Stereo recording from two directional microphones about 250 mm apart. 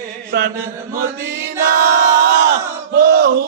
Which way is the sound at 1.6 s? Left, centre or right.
Right.